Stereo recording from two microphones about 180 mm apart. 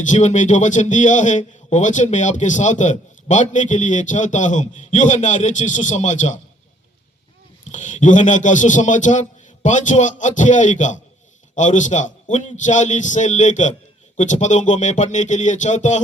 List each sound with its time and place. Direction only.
0.1 s a man's voice: 40° left (ahead or behind)
7.7 s a man's voice: 40° left (ahead or behind)